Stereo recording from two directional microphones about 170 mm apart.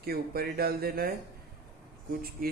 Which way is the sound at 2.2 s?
60° right (ahead or behind).